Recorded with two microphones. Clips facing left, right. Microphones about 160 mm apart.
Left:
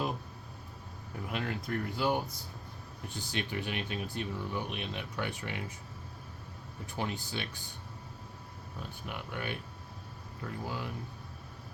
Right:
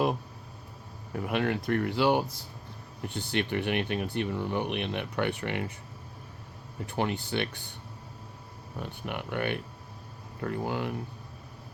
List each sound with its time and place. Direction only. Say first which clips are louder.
1.2 s speech: right 8 dB; 65° right (ahead or behind)
3.1 s speech: right 7 dB; 65° right (ahead or behind)
6.8 s speech: right 6 dB; 65° right (ahead or behind)
8.8 s speech: right 6 dB; 65° right (ahead or behind)